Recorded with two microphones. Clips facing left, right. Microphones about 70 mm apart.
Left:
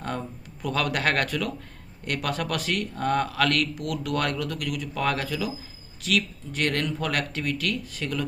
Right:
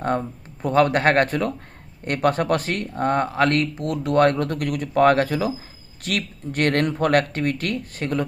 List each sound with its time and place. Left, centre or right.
0.2 s speech: right